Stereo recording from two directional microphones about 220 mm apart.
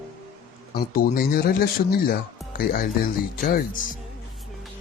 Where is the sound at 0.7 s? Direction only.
45° left (ahead or behind).